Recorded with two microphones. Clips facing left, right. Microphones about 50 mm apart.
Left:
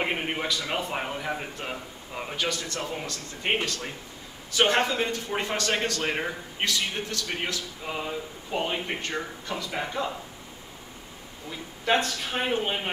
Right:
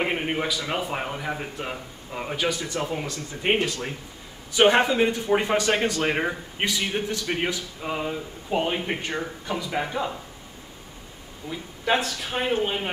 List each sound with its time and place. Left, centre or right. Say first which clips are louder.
0.0 s a man's voice: right 3 dB; centre
11.5 s speech: right 1 dB; centre